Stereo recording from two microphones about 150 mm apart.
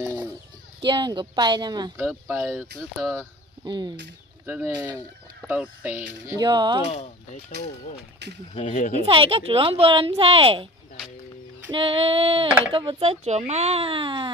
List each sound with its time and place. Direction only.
0.8 s speech: 30° right (ahead or behind)
2.0 s speech: 5° right (ahead or behind)
3.2 s speech: 30° right (ahead or behind)
4.5 s speech: 10° right (ahead or behind)
6.3 s speech: 30° right (ahead or behind)
6.9 s speech: 50° left (ahead or behind)
8.7 s speech: 55° left (ahead or behind)
9.0 s speech: 40° right (ahead or behind)
11.7 s speech: 35° right (ahead or behind)